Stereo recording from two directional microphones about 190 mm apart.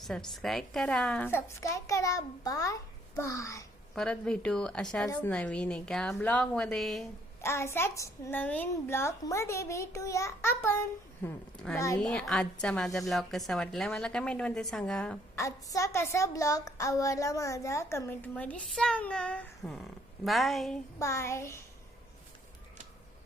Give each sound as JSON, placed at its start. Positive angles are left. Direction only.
{"t": 0.0, "sound": "a woman's voice", "side_deg": 0}
{"t": 3.9, "sound": "a woman's voice", "side_deg": 5}
{"t": 7.4, "sound": "a woman's voice", "side_deg": 15}
{"t": 15.4, "sound": "a woman's voice", "side_deg": 15}
{"t": 21.0, "sound": "a woman's voice", "side_deg": 15}